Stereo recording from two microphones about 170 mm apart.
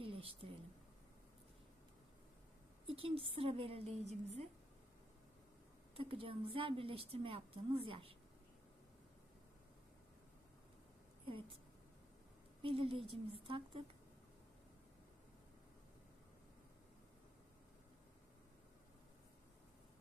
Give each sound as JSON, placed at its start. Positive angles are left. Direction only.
{"t": 0.0, "sound": "a sound", "side_deg": -35}
{"t": 2.8, "sound": "a woman's voice", "side_deg": -35}
{"t": 6.0, "sound": "a woman's voice", "side_deg": -35}
{"t": 12.6, "sound": "a woman's voice", "side_deg": -35}